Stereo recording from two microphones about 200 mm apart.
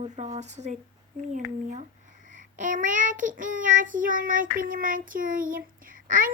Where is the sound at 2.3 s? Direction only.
40° right (ahead or behind).